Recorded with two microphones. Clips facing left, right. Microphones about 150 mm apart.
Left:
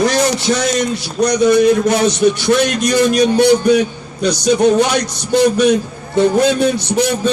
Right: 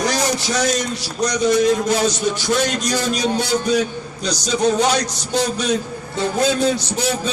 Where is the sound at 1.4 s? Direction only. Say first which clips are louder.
Left 5 dB; 65° left (ahead or behind).